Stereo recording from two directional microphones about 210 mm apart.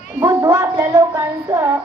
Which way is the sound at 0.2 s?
15° right (ahead or behind).